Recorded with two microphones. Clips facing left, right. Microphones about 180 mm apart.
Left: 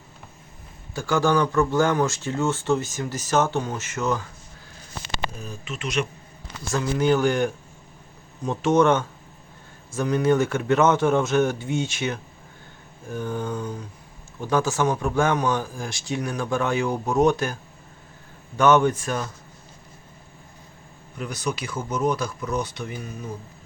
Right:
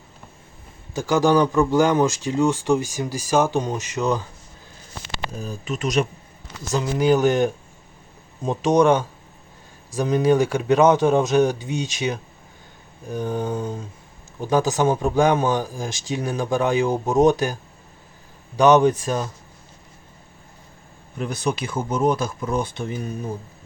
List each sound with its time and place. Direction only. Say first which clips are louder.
0.9 s speech: right 4 dB; 20° right (ahead or behind)
5.4 s speech: right 6 dB; 35° right (ahead or behind)
6.7 s speech: right 2 dB; 15° right (ahead or behind)
21.3 s speech: right 4 dB; 25° right (ahead or behind)